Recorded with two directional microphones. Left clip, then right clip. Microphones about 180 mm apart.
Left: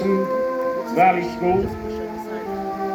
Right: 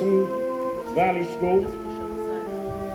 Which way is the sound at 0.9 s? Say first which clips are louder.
Left 6 dB; 70° right (ahead or behind).